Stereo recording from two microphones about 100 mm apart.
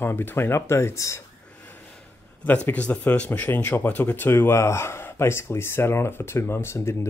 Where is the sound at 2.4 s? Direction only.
15° left (ahead or behind).